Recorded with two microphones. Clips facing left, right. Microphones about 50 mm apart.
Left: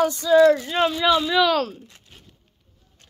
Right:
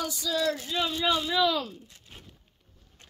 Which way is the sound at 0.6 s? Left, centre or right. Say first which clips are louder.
Left 8 dB; left.